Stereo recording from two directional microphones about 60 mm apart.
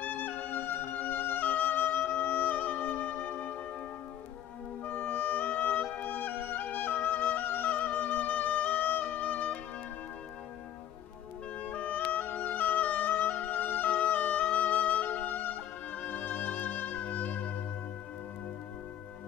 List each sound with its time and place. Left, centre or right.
0.0 s music: left
4.8 s music: left
11.6 s music: left